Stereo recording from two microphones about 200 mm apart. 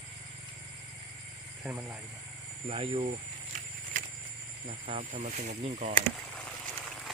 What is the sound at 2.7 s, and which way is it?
Speech, 25° right (ahead or behind).